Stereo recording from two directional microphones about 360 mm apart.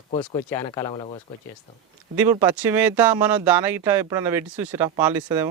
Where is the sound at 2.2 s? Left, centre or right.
Centre.